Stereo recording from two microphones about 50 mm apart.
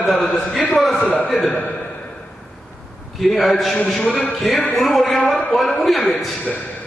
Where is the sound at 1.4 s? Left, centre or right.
Left.